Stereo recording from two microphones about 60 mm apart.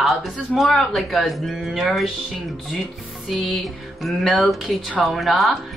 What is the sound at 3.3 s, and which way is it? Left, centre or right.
Speech, centre.